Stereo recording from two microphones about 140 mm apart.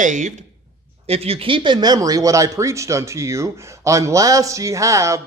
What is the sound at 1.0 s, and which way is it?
Speech, 45° right (ahead or behind).